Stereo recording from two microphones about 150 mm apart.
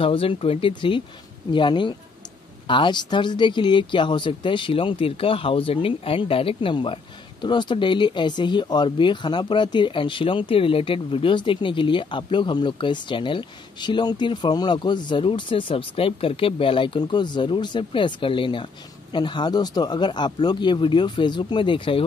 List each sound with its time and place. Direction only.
0.0 s speech: 35° left (ahead or behind)